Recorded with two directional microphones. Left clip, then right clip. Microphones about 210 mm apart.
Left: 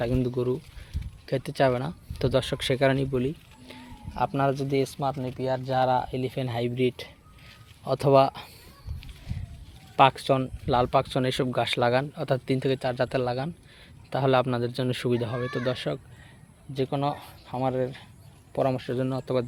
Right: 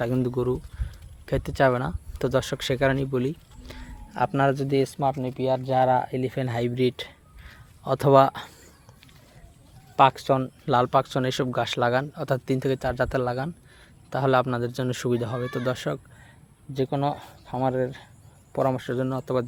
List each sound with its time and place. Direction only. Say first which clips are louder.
0.0 s speech: right 1 dB; 15° right (ahead or behind)
4.1 s speech: right 3 dB; 25° right (ahead or behind)
9.9 s speech: right 1 dB; centre (ahead or behind)